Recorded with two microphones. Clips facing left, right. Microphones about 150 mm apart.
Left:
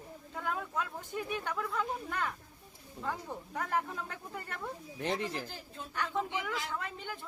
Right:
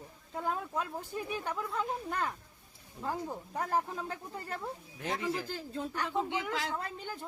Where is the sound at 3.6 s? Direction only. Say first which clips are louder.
Right 2 dB; 35° right (ahead or behind).